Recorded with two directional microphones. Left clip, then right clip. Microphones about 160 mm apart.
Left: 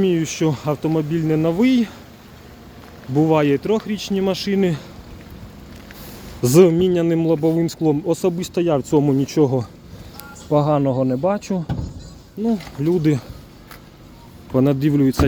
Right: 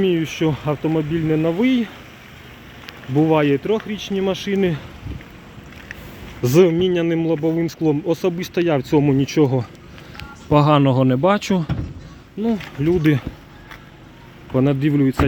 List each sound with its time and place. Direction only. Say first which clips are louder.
0.0 s speech: even; 5° left (ahead or behind)
3.2 s speech: even; centre (ahead or behind)
6.4 s speech: left 1 dB; 15° left (ahead or behind); by 10.9 s 10° right (ahead or behind)
11.0 s speech: right 3 dB; 20° right (ahead or behind)
12.4 s speech: even; 5° right (ahead or behind)
14.5 s speech: left 1 dB; 10° left (ahead or behind)